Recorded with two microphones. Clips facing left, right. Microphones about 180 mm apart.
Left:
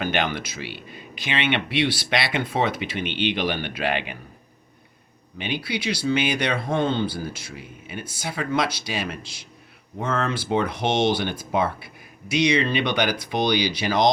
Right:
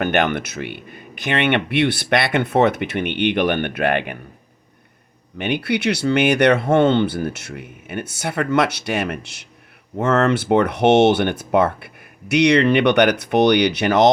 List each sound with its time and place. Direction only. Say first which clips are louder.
0.0 s speech: right 6 dB; 60° right (ahead or behind)
5.4 s speech: right 7 dB; 65° right (ahead or behind)